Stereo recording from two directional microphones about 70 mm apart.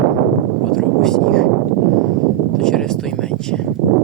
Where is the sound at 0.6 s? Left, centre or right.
Centre.